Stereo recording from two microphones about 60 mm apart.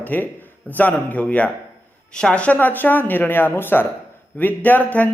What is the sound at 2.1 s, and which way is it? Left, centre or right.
Speech, centre.